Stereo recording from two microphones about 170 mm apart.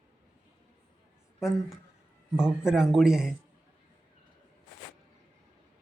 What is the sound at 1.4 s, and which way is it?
Speech, centre (ahead or behind).